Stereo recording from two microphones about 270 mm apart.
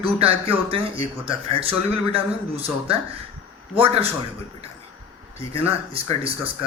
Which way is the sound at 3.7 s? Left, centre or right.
Right.